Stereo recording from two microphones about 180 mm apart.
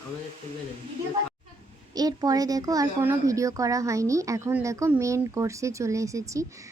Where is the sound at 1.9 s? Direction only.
20° right (ahead or behind).